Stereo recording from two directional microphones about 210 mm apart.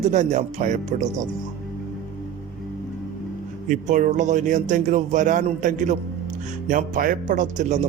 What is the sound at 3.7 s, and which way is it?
Speech, 35° right (ahead or behind).